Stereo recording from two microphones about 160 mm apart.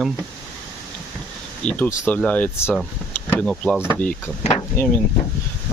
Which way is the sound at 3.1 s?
10° left (ahead or behind).